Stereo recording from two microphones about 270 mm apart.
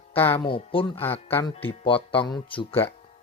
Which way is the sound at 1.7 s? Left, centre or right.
Centre.